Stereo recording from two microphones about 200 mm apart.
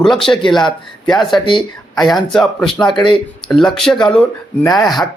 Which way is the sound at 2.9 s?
25° left (ahead or behind).